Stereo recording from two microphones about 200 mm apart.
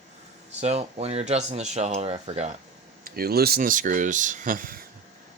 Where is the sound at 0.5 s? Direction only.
35° right (ahead or behind).